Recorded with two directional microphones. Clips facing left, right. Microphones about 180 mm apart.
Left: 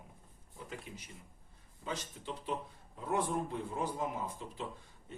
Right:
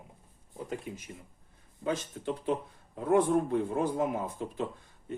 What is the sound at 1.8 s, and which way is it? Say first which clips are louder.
Speech: right 9 dB; 55° right (ahead or behind).